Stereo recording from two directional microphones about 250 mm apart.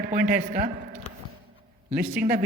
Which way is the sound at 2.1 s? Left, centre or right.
Right.